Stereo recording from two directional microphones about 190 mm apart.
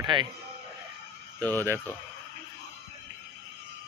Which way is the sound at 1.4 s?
10° left (ahead or behind).